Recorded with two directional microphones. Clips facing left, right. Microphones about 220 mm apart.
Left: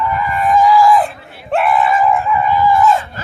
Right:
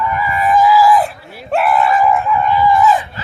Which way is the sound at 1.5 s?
Centre (ahead or behind).